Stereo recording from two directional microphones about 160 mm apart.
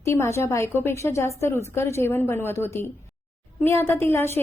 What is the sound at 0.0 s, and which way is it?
A woman's voice, 15° left (ahead or behind).